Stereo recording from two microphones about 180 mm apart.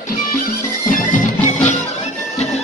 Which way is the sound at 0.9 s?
45° left (ahead or behind).